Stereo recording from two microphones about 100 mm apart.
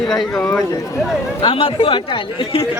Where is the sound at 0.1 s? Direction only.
5° left (ahead or behind).